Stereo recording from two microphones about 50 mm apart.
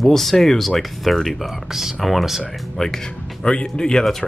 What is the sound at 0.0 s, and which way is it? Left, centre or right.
Speech, centre.